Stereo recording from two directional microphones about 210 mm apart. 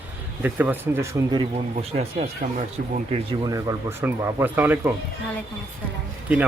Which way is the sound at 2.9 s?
25° right (ahead or behind).